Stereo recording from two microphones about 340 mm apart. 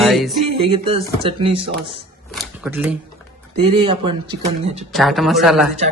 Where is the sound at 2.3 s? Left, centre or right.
Centre.